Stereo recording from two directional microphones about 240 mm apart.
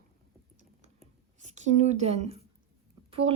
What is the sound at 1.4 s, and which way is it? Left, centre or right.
A woman's voice, right.